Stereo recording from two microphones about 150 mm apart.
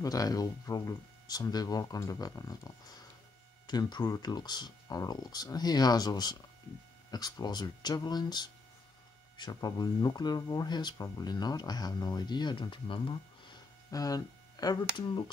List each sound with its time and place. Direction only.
0.0 s speech: 25° left (ahead or behind)